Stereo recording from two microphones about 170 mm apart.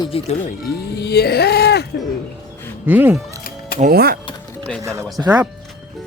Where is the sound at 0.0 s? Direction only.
35° left (ahead or behind).